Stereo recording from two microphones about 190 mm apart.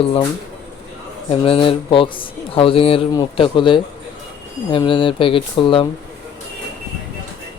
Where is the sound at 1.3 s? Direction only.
30° left (ahead or behind).